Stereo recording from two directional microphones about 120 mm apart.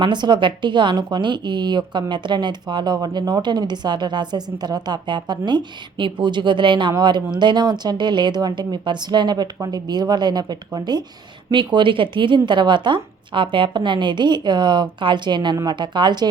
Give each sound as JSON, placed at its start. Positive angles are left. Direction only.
{"t": 0.0, "sound": "a woman's voice", "side_deg": -40}